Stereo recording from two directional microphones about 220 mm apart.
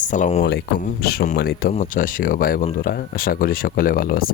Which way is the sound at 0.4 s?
50° left (ahead or behind).